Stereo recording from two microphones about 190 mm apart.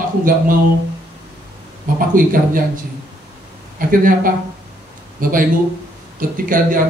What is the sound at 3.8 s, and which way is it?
Speech, 45° right (ahead or behind).